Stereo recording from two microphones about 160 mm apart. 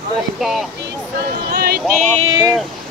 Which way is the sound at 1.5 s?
70° right (ahead or behind).